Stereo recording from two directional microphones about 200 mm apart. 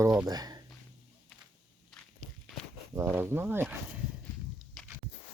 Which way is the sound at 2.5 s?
Centre (ahead or behind).